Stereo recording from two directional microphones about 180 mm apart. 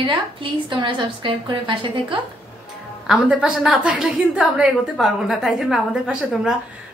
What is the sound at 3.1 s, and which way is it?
A woman's voice, 5° right (ahead or behind).